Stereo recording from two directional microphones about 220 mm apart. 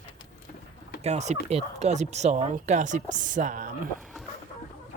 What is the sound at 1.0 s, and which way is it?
Speech, 30° right (ahead or behind).